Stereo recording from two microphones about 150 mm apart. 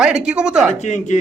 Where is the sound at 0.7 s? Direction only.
50° left (ahead or behind).